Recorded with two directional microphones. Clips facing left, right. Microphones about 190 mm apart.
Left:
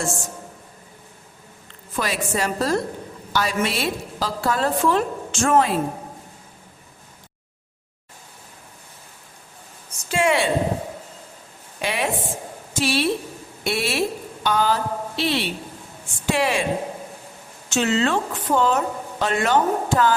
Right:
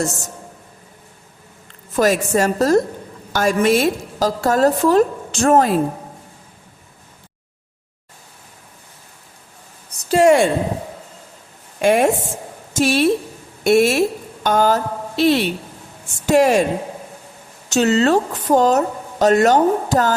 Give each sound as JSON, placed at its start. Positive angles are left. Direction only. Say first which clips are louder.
{"t": 0.0, "sound": "speech", "louder": "right 4 dB", "side_deg": -40}
{"t": 2.0, "sound": "a woman's voice", "louder": "right 8 dB", "side_deg": -45}
{"t": 10.1, "sound": "a woman's voice", "louder": "right 8 dB", "side_deg": -40}
{"t": 11.8, "sound": "a woman's voice", "louder": "right 10 dB", "side_deg": -50}
{"t": 17.7, "sound": "speech", "louder": "right 6 dB", "side_deg": -40}